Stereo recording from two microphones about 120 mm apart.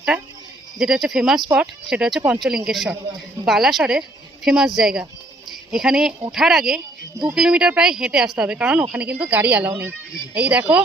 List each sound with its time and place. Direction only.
0.8 s a woman's voice: 5° right (ahead or behind)